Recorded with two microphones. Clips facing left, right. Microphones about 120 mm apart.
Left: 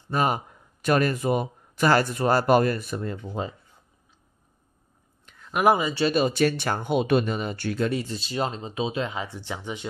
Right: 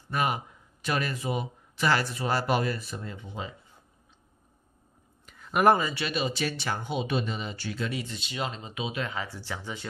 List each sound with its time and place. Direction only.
0.1 s speech: 35° left (ahead or behind)
0.8 s speech: 50° left (ahead or behind)
3.4 s speech: 40° left (ahead or behind)
5.2 s a sound: centre (ahead or behind)
5.9 s speech: 35° left (ahead or behind)
6.2 s speech: 50° left (ahead or behind); by 9.8 s 20° left (ahead or behind)